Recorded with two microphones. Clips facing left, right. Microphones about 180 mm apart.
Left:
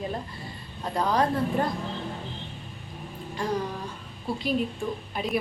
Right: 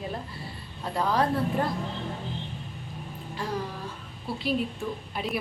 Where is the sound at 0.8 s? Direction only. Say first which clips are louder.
Left 1 dB; 5° right (ahead or behind).